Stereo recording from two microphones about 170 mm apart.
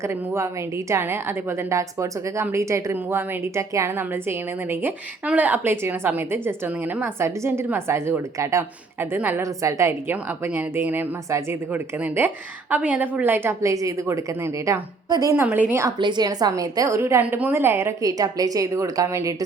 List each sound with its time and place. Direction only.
0.0 s a woman's voice: 15° right (ahead or behind)
16.0 s a woman's voice: 25° right (ahead or behind)